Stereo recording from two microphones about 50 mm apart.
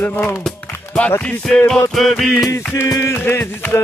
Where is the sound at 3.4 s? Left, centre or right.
Left.